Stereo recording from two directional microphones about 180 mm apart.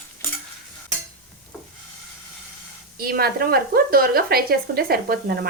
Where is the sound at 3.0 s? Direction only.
55° right (ahead or behind).